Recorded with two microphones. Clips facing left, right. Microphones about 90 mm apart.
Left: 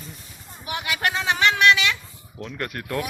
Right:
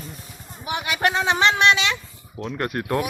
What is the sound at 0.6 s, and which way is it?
Speech, 25° right (ahead or behind).